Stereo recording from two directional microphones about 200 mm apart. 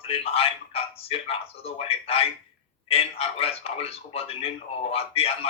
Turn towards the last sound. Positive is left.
turn(degrees=30)  # may be behind; listen again after turning